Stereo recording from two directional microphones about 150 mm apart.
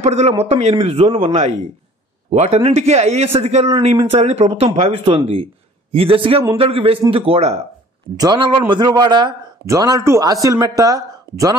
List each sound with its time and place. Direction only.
0.0 s a man's voice: 50° right (ahead or behind)
8.2 s a man's voice: 30° right (ahead or behind)